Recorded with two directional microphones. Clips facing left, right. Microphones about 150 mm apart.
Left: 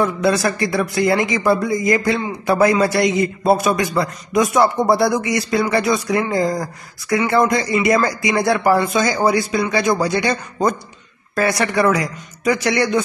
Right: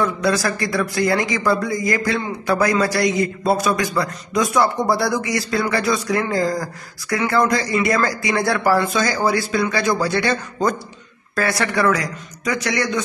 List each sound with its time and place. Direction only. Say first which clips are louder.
0.0 s a man's voice: left 2 dB; 25° left (ahead or behind)